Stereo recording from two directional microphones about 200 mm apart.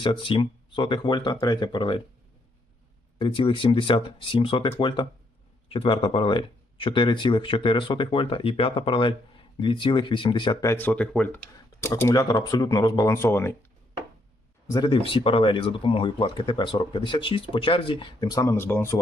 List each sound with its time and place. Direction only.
0.0 s speech: 25° left (ahead or behind)
3.2 s speech: 25° left (ahead or behind)
14.7 s speech: 20° left (ahead or behind)